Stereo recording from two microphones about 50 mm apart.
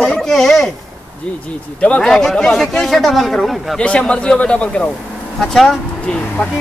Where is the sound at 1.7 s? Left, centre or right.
Left.